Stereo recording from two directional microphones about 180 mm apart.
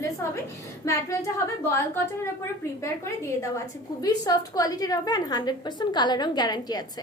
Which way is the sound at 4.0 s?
20° left (ahead or behind).